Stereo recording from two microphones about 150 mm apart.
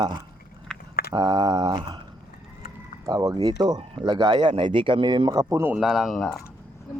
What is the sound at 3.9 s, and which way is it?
Speech, 30° right (ahead or behind).